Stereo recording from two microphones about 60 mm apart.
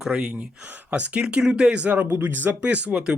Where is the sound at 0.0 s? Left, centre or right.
Centre.